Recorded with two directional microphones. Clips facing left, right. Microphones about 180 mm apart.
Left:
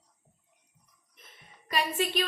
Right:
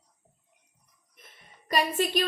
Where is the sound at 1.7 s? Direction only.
40° right (ahead or behind).